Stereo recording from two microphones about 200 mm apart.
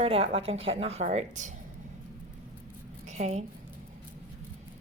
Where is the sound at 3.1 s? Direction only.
35° right (ahead or behind).